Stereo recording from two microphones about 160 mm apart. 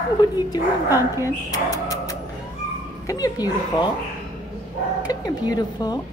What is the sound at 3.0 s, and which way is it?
Speech, 20° left (ahead or behind).